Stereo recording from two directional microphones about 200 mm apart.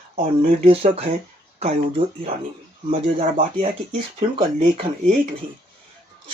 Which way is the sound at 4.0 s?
25° right (ahead or behind).